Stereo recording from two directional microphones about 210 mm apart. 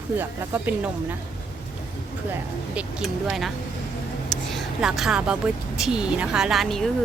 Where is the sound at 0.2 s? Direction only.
10° right (ahead or behind).